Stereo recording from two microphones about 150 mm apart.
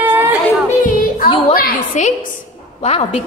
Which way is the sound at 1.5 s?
75° left (ahead or behind).